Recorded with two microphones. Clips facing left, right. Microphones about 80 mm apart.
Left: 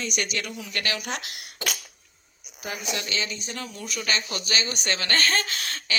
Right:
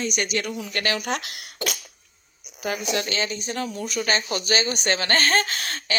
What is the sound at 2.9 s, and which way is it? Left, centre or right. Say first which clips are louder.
Speech: right 2 dB; right.